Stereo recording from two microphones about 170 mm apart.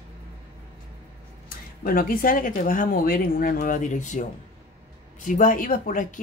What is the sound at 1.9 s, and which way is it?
Speech, 55° left (ahead or behind).